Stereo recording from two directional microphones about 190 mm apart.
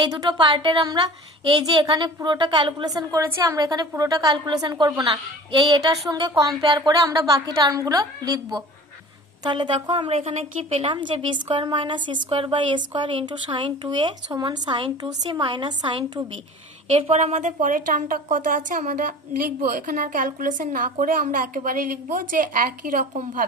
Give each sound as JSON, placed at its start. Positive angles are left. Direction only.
{"t": 0.0, "sound": "a woman's voice", "side_deg": -20}
{"t": 9.4, "sound": "a woman's voice", "side_deg": -25}
{"t": 16.9, "sound": "a woman's voice", "side_deg": -35}